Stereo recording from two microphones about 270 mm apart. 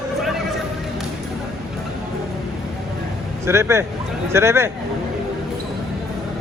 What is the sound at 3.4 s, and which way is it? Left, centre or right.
A man's voice, centre.